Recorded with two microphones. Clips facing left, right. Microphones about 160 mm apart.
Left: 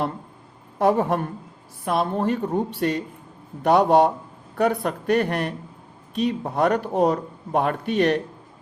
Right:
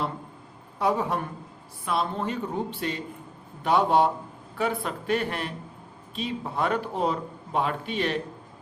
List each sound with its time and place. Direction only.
0.8 s speech: 50° left (ahead or behind)